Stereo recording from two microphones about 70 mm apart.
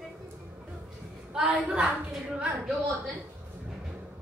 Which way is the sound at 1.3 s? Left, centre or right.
Centre.